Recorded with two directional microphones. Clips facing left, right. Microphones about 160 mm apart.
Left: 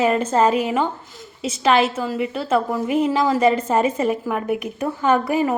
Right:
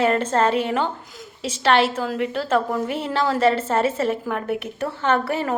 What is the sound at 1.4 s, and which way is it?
Speech, 35° right (ahead or behind).